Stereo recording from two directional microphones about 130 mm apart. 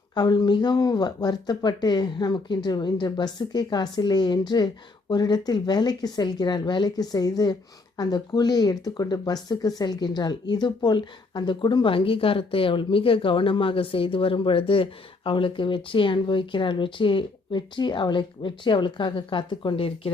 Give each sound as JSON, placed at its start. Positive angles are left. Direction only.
{"t": 0.1, "sound": "speech", "side_deg": 35}